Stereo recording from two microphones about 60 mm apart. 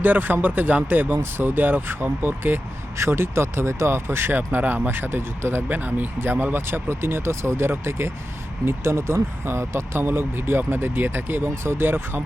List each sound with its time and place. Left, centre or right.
0.0 s speech: right
3.0 s speech: right
5.6 s speech: right